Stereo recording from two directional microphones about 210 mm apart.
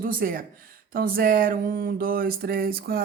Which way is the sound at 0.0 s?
40° right (ahead or behind).